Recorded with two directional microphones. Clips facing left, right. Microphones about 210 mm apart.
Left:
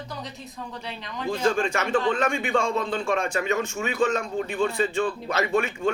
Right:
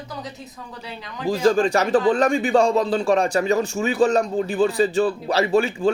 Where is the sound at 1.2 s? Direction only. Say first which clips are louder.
Right 6 dB; 35° right (ahead or behind).